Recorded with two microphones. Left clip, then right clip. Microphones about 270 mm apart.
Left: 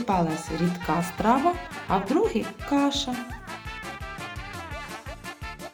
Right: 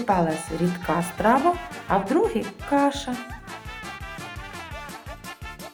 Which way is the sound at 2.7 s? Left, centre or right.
Left.